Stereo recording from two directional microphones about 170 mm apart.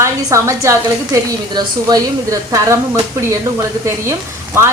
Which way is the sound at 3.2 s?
15° right (ahead or behind).